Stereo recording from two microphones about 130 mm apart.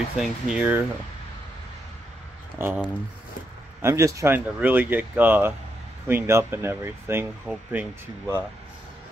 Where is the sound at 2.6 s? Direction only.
20° right (ahead or behind).